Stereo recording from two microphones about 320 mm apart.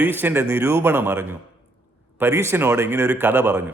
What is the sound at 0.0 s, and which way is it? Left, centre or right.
A man's voice, centre.